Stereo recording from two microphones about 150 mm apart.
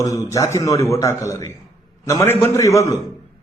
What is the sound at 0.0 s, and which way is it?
A man's voice, 20° left (ahead or behind).